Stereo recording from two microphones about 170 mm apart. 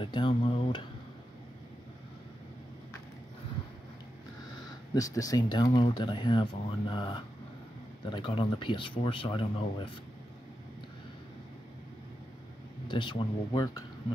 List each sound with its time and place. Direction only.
0.0 s speech: 30° left (ahead or behind)
4.9 s speech: 20° left (ahead or behind)
12.8 s speech: 30° left (ahead or behind)